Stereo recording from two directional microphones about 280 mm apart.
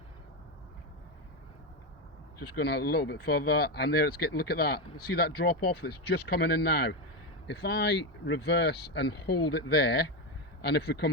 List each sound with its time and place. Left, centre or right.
2.6 s speech: left